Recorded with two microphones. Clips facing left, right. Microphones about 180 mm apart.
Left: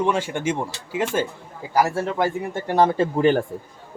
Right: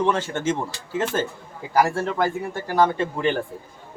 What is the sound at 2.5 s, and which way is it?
Speech, 25° left (ahead or behind).